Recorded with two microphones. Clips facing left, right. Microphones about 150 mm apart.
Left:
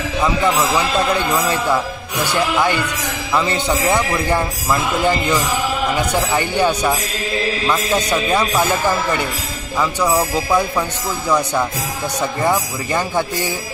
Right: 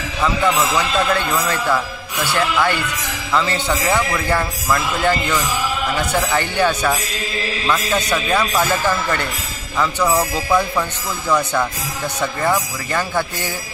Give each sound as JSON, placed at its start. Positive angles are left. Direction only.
{"t": 0.7, "sound": "speech", "side_deg": 15}